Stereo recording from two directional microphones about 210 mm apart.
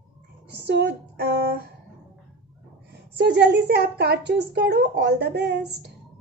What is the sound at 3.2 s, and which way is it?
A woman's voice, 55° right (ahead or behind).